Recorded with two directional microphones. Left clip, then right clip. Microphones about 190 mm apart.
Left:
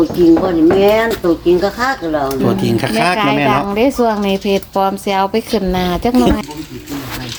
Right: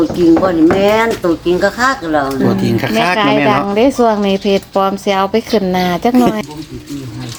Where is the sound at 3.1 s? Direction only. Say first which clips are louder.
Right 2 dB; 20° right (ahead or behind).